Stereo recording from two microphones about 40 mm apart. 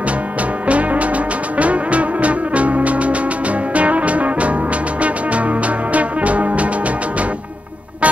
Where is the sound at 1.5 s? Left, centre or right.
Right.